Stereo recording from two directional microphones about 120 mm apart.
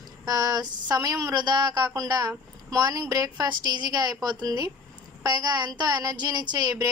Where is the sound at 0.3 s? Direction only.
30° right (ahead or behind).